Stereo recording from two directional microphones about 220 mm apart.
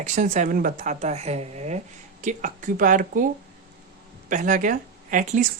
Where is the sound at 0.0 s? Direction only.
35° right (ahead or behind).